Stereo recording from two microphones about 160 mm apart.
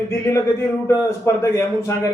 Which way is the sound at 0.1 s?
15° left (ahead or behind).